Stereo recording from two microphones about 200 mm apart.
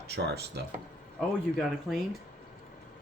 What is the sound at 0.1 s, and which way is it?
Speech, 55° right (ahead or behind).